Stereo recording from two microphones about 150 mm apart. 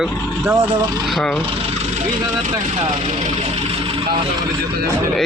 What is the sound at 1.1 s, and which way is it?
Speech, 5° left (ahead or behind).